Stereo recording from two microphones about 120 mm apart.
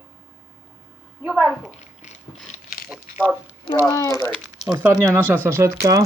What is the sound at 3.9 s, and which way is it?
Speech, 25° left (ahead or behind).